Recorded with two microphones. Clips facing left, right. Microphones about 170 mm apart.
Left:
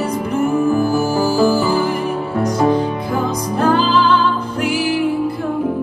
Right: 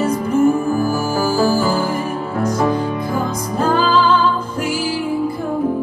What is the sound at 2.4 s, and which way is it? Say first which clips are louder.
Music: left 2 dB; 65° left (ahead or behind).